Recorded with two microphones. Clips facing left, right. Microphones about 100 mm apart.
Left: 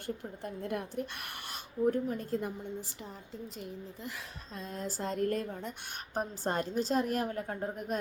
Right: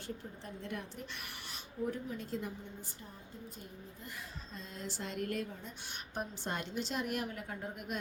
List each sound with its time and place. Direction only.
0.4 s a woman's voice: 50° left (ahead or behind)
3.6 s a woman's voice: 90° left
4.6 s a woman's voice: 45° left (ahead or behind)